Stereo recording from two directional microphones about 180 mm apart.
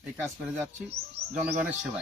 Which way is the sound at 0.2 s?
10° right (ahead or behind).